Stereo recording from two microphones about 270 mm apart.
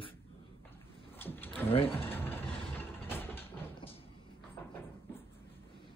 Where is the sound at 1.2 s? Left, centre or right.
Centre.